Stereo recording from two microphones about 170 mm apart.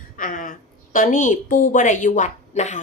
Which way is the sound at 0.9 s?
50° left (ahead or behind).